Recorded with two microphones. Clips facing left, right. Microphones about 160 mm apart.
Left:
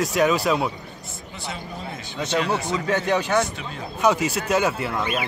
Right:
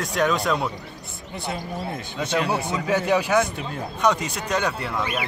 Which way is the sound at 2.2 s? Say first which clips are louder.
Even; 55° right (ahead or behind).